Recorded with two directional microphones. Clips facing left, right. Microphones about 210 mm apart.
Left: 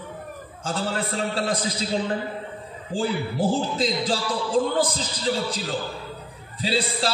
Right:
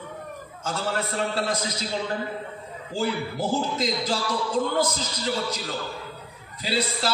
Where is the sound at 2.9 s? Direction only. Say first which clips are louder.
Left 2 dB; 30° left (ahead or behind).